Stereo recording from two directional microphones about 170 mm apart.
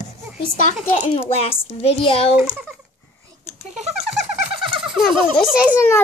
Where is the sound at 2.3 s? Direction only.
5° right (ahead or behind).